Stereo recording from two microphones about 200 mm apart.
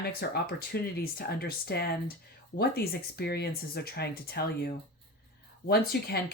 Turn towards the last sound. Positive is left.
turn(degrees=50)  # may be behind; listen again after turning